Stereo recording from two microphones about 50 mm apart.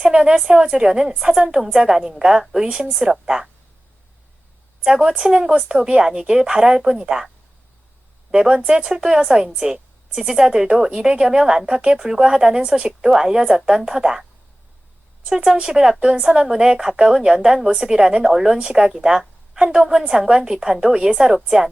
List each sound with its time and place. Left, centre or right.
0.0 s a woman's voice: centre
4.8 s a woman's voice: centre
8.3 s a woman's voice: centre